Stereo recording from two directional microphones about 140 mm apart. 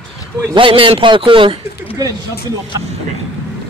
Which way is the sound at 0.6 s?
40° right (ahead or behind).